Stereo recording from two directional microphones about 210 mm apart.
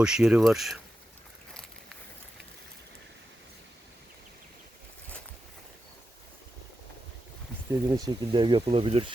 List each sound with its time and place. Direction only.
0.0 s speech: 5° right (ahead or behind)
7.9 s speech: 20° right (ahead or behind)